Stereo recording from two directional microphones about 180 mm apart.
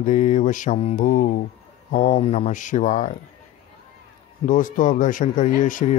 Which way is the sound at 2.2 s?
35° left (ahead or behind).